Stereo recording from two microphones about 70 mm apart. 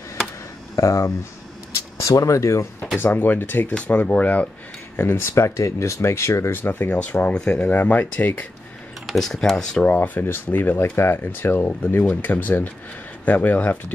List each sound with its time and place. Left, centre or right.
0.7 s speech: left
3.0 s speech: left
4.9 s speech: left
6.5 s speech: left
9.0 s speech: centre
9.8 s speech: left